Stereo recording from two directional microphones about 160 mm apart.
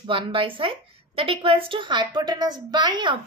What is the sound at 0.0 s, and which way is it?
A woman's voice, 35° right (ahead or behind).